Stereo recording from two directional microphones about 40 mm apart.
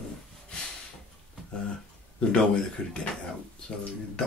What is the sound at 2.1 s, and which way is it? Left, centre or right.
Speech, left.